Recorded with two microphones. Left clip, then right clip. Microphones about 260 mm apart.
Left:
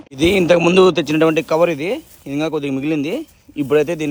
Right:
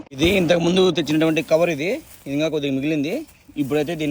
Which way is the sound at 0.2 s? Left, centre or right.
Centre.